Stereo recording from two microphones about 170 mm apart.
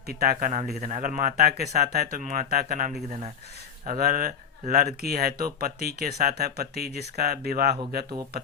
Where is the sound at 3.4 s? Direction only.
65° right (ahead or behind).